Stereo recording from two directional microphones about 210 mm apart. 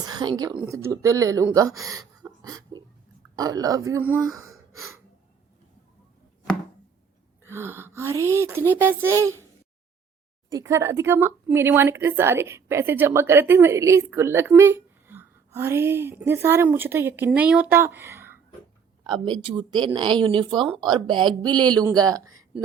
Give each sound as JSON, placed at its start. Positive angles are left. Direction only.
{"t": 0.0, "sound": "a woman's voice", "side_deg": -20}
{"t": 1.8, "sound": "a sound", "side_deg": -15}
{"t": 3.3, "sound": "speech", "side_deg": -20}
{"t": 7.4, "sound": "speech", "side_deg": -10}
{"t": 10.5, "sound": "speech", "side_deg": -15}